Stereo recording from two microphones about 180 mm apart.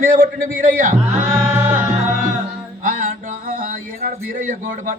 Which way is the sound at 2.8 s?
50° right (ahead or behind).